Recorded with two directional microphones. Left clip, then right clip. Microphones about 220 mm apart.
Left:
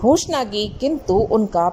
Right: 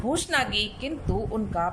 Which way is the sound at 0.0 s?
25° left (ahead or behind).